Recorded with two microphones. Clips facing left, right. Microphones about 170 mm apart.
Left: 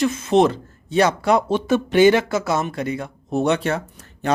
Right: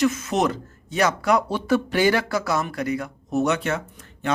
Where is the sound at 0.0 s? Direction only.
30° left (ahead or behind).